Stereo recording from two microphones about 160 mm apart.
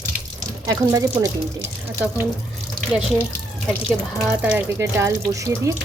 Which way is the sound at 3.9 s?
5° right (ahead or behind).